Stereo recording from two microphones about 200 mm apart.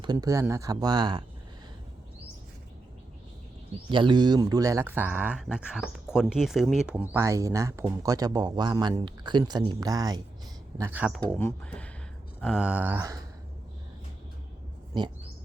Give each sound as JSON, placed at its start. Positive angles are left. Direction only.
{"t": 0.0, "sound": "speech", "side_deg": -20}
{"t": 3.9, "sound": "speech", "side_deg": -25}
{"t": 11.3, "sound": "speech", "side_deg": 5}